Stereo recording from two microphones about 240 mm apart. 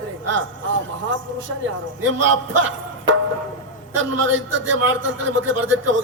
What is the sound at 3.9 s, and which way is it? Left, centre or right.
A man's voice, right.